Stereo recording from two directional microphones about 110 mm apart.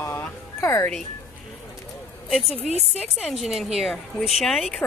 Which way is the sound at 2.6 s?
80° left.